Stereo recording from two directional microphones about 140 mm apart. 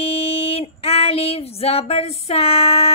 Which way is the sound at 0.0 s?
45° left (ahead or behind).